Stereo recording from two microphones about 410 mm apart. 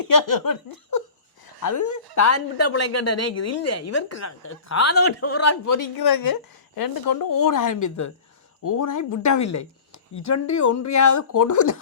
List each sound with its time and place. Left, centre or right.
0.0 s laughter: left
1.6 s a woman's voice: left